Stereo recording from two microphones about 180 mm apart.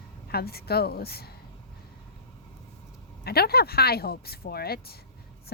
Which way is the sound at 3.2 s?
60° left (ahead or behind).